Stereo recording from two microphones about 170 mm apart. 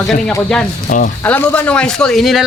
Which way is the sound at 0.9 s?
50° left (ahead or behind).